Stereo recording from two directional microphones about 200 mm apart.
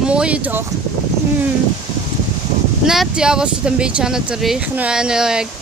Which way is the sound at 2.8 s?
Centre (ahead or behind).